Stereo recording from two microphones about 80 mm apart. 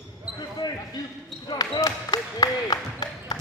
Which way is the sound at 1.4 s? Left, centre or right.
Left.